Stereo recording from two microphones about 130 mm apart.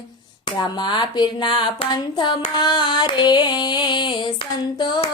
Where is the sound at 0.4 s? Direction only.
35° left (ahead or behind).